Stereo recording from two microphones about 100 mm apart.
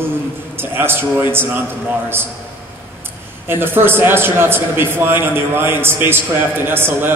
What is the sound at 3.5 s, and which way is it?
A man's voice, 20° right (ahead or behind).